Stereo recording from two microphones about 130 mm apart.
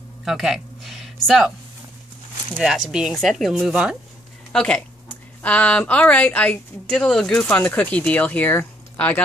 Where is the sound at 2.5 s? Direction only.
5° right (ahead or behind).